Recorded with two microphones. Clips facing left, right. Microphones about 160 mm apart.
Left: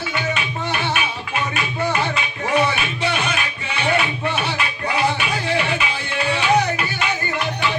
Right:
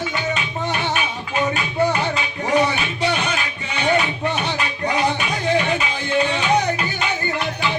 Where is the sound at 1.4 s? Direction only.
35° right (ahead or behind).